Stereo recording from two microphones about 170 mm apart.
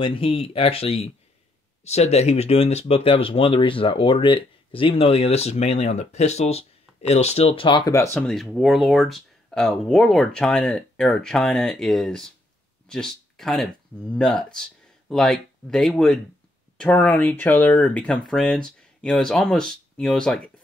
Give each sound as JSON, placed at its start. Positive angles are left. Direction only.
{"t": 0.0, "sound": "speech", "side_deg": 30}
{"t": 8.5, "sound": "speech", "side_deg": 0}